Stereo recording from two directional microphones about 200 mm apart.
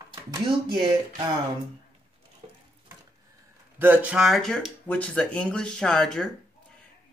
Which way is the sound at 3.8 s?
10° right (ahead or behind).